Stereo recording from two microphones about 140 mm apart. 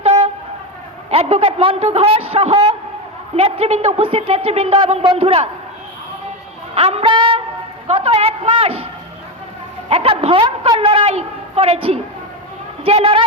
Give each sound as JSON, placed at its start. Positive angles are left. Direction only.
{"t": 0.0, "sound": "train", "side_deg": -50}
{"t": 1.1, "sound": "a woman's voice", "side_deg": -45}
{"t": 6.7, "sound": "music", "side_deg": -45}
{"t": 7.9, "sound": "a woman's voice", "side_deg": -45}
{"t": 9.9, "sound": "a woman's voice", "side_deg": -45}